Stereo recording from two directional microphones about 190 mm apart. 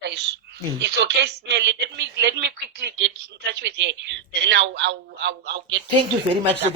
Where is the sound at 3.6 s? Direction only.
65° right (ahead or behind).